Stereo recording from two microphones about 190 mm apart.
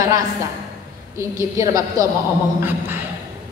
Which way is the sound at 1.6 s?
20° right (ahead or behind).